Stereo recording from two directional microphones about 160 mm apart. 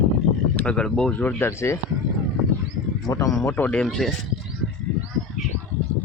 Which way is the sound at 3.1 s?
20° left (ahead or behind).